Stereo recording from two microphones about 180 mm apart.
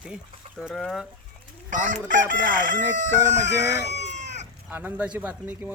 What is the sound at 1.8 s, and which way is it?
Crowing, 45° right (ahead or behind).